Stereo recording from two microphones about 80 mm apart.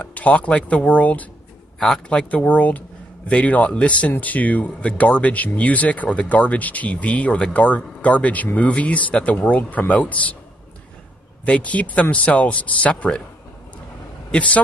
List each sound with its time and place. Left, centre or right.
0.0 s speech: centre
11.4 s speech: centre
14.3 s speech: centre